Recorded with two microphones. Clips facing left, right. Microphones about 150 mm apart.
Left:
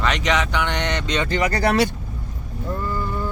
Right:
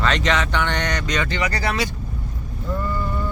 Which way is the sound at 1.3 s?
45° left (ahead or behind).